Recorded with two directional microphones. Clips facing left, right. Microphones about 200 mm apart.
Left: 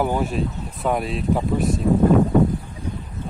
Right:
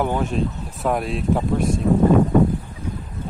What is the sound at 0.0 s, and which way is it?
Speech, 5° left (ahead or behind).